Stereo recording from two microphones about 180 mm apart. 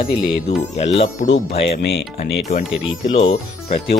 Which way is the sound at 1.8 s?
65° left (ahead or behind).